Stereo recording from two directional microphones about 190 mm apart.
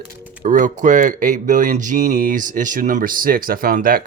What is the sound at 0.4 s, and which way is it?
Speech, 40° right (ahead or behind).